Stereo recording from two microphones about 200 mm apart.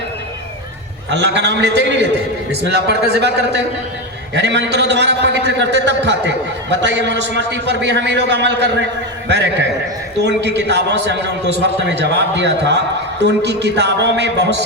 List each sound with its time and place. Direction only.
1.1 s a man's voice: 60° right (ahead or behind)